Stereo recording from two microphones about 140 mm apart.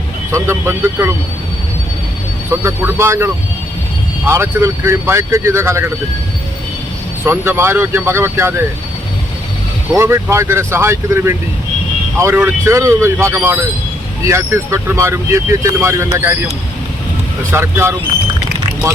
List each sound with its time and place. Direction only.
0.3 s speech: 20° right (ahead or behind)
2.5 s speech: 20° right (ahead or behind)
7.3 s speech: 15° right (ahead or behind)
9.9 s speech: 20° right (ahead or behind)
17.5 s speech: 20° right (ahead or behind)